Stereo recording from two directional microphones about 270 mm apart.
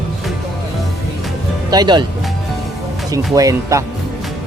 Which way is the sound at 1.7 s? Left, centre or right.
Centre.